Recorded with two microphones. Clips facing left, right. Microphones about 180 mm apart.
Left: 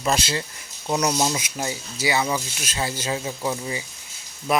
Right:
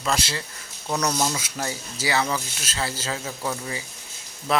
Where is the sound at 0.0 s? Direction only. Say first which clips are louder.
Left 3 dB; 20° left (ahead or behind).